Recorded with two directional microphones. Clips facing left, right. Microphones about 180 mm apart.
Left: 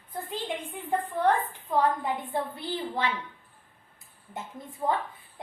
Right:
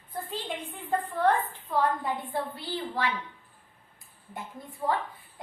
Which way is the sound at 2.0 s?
20° left (ahead or behind).